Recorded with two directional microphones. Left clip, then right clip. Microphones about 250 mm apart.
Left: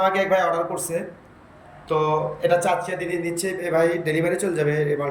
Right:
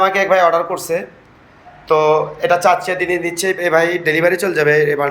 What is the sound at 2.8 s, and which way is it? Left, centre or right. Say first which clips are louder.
Speech: right 8 dB; right.